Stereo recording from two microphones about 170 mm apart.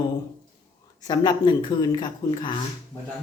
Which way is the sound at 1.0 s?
25° left (ahead or behind).